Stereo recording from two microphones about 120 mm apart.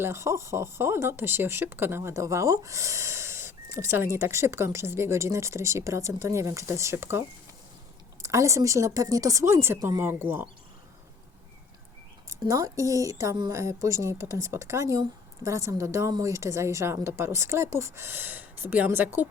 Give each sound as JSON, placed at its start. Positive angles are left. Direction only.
{"t": 0.0, "sound": "speech", "side_deg": -25}
{"t": 12.3, "sound": "speech", "side_deg": -30}